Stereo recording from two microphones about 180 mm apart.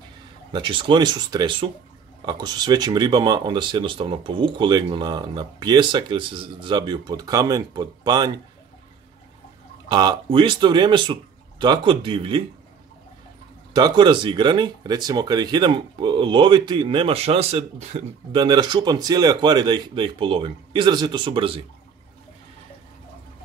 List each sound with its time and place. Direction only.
0.5 s speech: 25° right (ahead or behind)
9.8 s speech: 25° right (ahead or behind)
13.7 s speech: 25° right (ahead or behind)